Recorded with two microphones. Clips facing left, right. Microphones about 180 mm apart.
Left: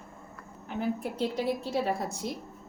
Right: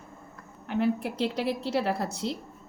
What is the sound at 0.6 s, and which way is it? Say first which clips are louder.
A woman's voice: right 5 dB; 75° right (ahead or behind).